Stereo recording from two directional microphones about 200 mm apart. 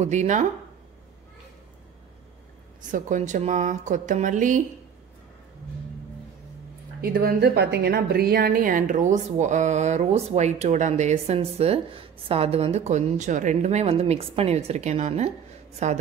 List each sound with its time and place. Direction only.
0.0 s speech: 35° right (ahead or behind)
2.8 s speech: 40° right (ahead or behind)
7.0 s speech: 45° right (ahead or behind)